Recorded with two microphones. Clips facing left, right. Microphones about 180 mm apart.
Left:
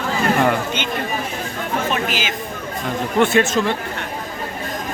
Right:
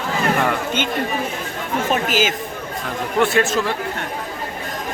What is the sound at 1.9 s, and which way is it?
Chatter, 45° right (ahead or behind).